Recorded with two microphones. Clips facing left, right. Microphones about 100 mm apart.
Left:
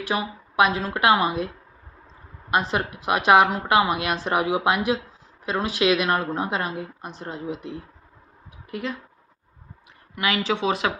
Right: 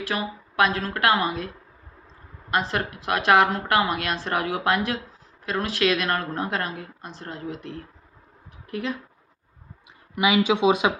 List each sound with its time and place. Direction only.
0.0 s a woman's voice: 15° left (ahead or behind)
2.5 s a woman's voice: 15° left (ahead or behind)
8.6 s speech: centre (ahead or behind)
10.2 s speech: 15° right (ahead or behind)